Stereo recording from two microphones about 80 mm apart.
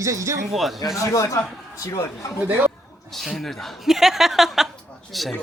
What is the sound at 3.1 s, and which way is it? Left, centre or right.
A woman's voice, centre.